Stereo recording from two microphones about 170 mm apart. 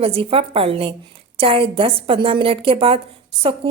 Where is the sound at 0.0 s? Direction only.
35° right (ahead or behind).